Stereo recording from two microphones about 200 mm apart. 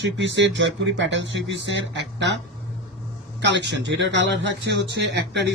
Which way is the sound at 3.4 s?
60° right (ahead or behind).